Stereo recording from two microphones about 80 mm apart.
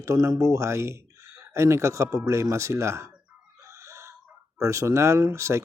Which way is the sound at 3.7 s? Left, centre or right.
Right.